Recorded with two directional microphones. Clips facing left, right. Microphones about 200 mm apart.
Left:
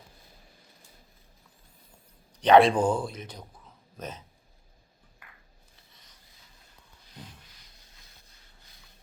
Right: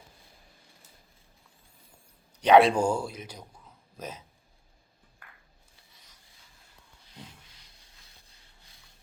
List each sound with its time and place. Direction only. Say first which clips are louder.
2.4 s speech: even; 10° right (ahead or behind)